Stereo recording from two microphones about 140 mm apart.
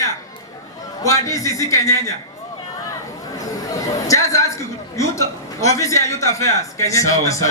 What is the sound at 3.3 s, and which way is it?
A man's voice, 25° left (ahead or behind).